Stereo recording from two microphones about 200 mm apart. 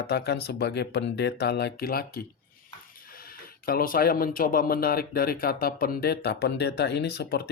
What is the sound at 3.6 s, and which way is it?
Speech, 45° left (ahead or behind).